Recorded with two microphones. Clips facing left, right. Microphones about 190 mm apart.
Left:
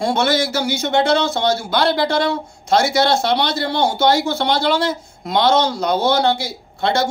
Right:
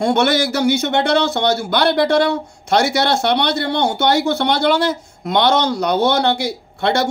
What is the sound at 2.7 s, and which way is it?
A man's voice, 65° right (ahead or behind).